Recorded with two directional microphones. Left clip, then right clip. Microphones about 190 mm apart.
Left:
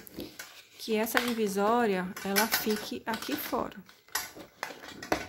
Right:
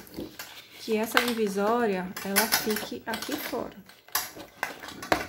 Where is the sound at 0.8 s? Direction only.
15° left (ahead or behind); by 3.8 s 35° left (ahead or behind).